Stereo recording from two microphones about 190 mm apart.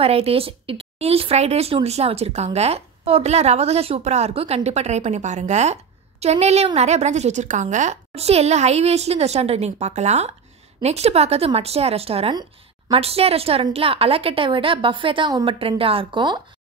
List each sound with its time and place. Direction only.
0.0 s a woman's voice: 30° right (ahead or behind)